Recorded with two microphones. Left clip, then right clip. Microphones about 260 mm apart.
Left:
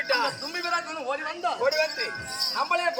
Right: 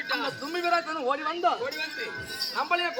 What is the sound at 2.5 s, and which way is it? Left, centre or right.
Speech, centre.